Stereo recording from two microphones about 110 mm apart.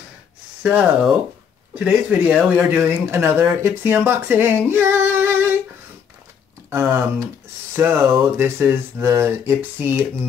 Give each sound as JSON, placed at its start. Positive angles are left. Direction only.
{"t": 0.6, "sound": "speech", "side_deg": -10}
{"t": 6.7, "sound": "speech", "side_deg": -20}